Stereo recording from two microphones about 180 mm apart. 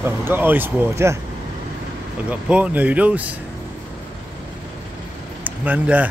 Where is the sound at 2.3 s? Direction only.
5° right (ahead or behind).